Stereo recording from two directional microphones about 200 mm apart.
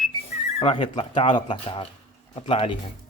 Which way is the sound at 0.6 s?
25° left (ahead or behind).